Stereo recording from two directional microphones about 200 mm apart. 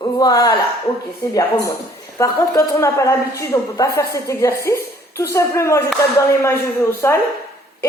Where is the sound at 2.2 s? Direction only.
15° left (ahead or behind).